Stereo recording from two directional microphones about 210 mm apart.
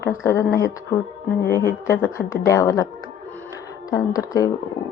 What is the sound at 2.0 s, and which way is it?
Speech, 15° left (ahead or behind).